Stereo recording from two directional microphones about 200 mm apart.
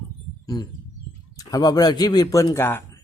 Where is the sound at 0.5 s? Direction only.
20° left (ahead or behind).